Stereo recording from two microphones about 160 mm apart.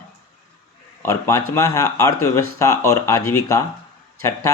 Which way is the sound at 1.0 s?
20° left (ahead or behind).